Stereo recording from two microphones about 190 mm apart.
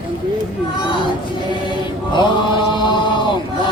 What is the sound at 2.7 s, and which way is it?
Chant, 25° left (ahead or behind).